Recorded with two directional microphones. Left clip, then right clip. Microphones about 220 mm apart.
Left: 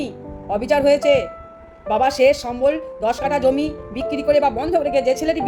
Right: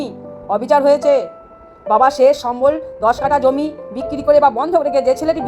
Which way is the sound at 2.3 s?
Centre (ahead or behind).